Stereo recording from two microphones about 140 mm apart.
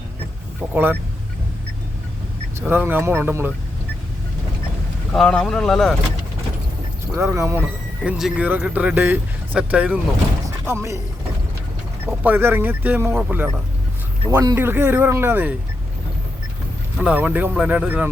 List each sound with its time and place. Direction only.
0.7 s speech: 15° right (ahead or behind)
2.6 s speech: 15° right (ahead or behind)
5.1 s speech: 5° left (ahead or behind)
7.2 s speech: 20° right (ahead or behind)
10.7 s speech: 20° right (ahead or behind)
12.2 s speech: 15° right (ahead or behind)
14.3 s speech: 25° right (ahead or behind)
14.5 s speech: 15° right (ahead or behind)
17.0 s speech: 10° right (ahead or behind)